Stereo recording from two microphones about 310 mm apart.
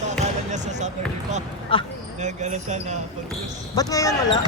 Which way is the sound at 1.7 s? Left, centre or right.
Centre.